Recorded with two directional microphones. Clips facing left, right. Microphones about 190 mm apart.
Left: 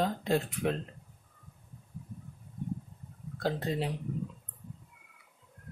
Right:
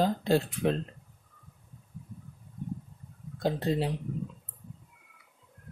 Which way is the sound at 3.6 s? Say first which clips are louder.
Right 4 dB; 30° right (ahead or behind).